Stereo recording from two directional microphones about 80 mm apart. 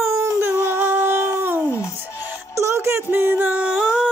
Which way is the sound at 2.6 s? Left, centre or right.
Right.